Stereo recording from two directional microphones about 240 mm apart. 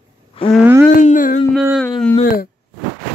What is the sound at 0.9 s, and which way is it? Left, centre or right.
Speech, left.